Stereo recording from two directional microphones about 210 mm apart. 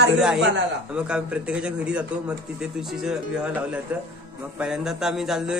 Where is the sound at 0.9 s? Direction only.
5° right (ahead or behind).